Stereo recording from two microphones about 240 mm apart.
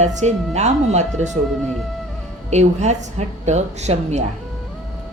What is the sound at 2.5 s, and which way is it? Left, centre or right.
A woman's voice, right.